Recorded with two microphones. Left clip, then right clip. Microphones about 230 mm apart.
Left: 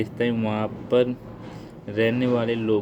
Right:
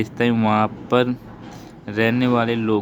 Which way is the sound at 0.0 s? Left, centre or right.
Right.